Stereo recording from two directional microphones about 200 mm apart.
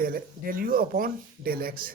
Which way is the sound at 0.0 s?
45° right (ahead or behind).